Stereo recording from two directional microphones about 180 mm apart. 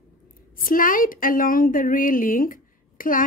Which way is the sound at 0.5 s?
50° left (ahead or behind).